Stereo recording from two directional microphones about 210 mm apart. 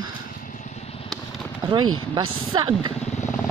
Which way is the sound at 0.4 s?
40° left (ahead or behind).